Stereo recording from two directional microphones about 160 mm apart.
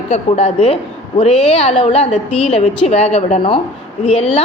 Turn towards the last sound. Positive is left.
turn(degrees=40)  # may be behind; listen again after turning